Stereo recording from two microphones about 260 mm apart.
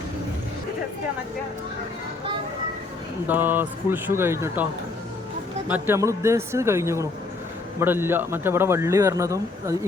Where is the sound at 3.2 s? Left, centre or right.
Centre.